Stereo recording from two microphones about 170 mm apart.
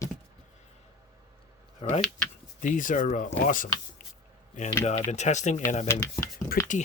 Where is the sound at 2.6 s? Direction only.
50° left (ahead or behind).